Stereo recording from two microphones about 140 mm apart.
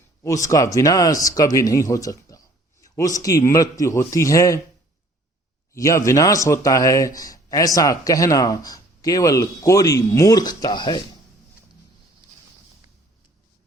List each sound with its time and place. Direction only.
0.2 s speech: 20° left (ahead or behind)
5.7 s speech: 20° left (ahead or behind)